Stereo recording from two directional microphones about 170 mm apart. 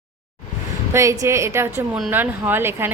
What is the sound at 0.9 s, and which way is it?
Speech, 15° right (ahead or behind).